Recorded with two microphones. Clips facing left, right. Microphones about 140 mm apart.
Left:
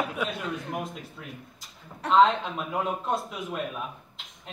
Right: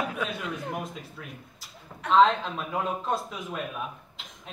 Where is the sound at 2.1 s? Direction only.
Centre (ahead or behind).